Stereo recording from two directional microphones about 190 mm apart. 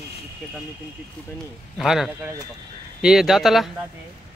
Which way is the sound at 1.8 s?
Centre (ahead or behind).